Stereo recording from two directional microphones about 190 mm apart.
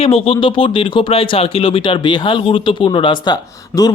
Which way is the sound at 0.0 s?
30° left (ahead or behind).